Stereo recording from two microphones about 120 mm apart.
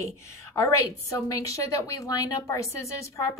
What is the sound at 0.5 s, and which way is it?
A woman's voice, 25° left (ahead or behind).